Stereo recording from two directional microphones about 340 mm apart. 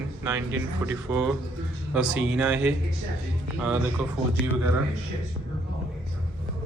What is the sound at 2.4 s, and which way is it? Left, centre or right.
Speech, centre.